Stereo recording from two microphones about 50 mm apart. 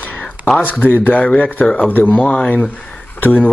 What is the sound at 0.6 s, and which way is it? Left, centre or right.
Speech, left.